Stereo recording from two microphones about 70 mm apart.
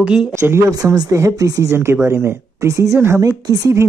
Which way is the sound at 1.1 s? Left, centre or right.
Right.